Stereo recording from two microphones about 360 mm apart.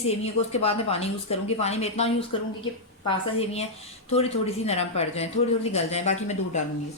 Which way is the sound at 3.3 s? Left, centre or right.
Centre.